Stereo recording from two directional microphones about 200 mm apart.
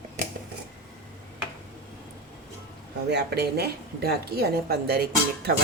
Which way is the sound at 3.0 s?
55° right (ahead or behind).